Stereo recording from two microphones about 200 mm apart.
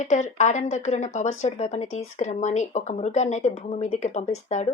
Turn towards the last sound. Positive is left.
turn(degrees=35)  # may be behind; listen again after turning